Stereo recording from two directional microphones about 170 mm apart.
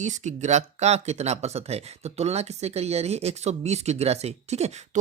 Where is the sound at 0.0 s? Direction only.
45° right (ahead or behind).